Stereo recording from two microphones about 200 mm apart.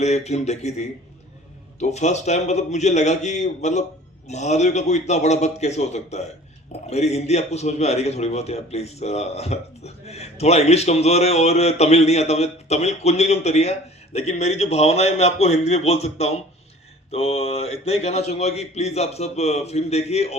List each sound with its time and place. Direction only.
0.0 s a man's voice: 35° left (ahead or behind)